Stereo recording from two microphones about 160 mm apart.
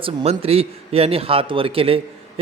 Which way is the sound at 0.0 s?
35° right (ahead or behind).